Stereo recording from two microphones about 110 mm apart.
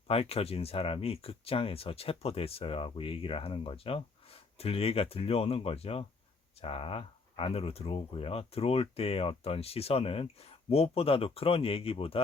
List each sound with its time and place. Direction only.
0.1 s speech: 65° left (ahead or behind)